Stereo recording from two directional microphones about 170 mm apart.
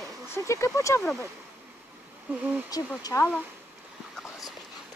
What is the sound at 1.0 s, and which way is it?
Speech, centre (ahead or behind).